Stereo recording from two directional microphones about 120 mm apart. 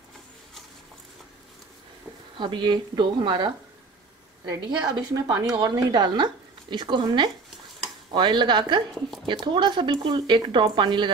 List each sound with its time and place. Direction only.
2.3 s speech: 40° right (ahead or behind)
4.6 s speech: 35° right (ahead or behind)